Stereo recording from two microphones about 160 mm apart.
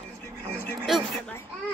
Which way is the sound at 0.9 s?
Centre (ahead or behind).